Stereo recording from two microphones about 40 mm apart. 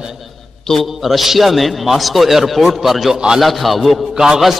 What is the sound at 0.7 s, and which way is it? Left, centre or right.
A man's voice, centre.